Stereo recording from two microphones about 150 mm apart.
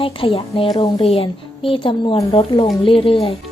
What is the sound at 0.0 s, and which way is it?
A woman's voice, 35° left (ahead or behind).